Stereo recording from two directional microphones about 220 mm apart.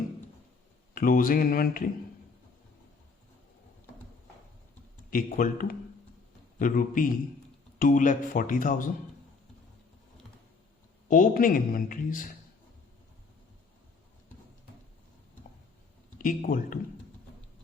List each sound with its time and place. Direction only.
0.9 s speech: 40° left (ahead or behind)
5.1 s speech: 40° left (ahead or behind)
11.1 s speech: 40° left (ahead or behind)
16.1 s speech: 40° left (ahead or behind)